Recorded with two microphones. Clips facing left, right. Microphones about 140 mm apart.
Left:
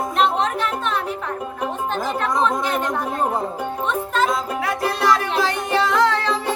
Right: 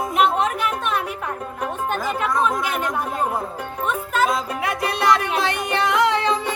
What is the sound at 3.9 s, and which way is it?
Music, 5° right (ahead or behind).